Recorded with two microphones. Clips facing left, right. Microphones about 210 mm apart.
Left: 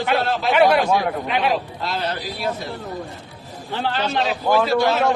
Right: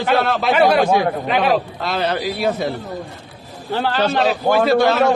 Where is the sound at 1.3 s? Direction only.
60° right (ahead or behind).